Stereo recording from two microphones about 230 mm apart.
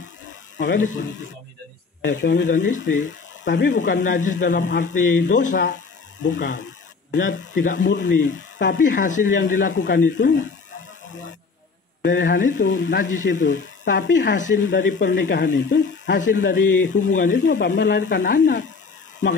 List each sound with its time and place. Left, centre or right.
0.6 s speech: left
2.0 s speech: left
4.2 s speech: left
4.5 s speech: left
6.6 s a sound: left
7.7 s speech: left
8.9 s speech: left
9.6 s speech: left
12.0 s speech: left
12.6 s speech: left
16.9 s speech: left
17.6 s speech: left